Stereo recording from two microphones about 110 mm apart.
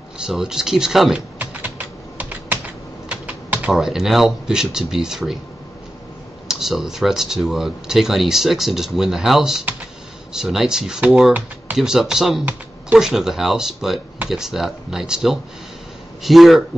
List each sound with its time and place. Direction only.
0.2 s speech: 5° right (ahead or behind)
1.4 s typing: 15° right (ahead or behind)
3.7 s speech: 5° right (ahead or behind)
6.4 s speech: 5° right (ahead or behind)